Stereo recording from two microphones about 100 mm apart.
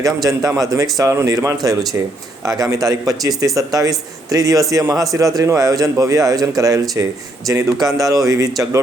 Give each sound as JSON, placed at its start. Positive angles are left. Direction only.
{"t": 0.0, "sound": "a man's voice", "side_deg": -35}